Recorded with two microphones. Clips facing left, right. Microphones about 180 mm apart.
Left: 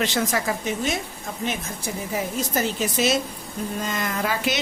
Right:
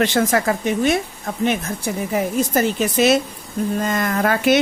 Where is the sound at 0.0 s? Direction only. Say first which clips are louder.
Right 6 dB; 55° right (ahead or behind).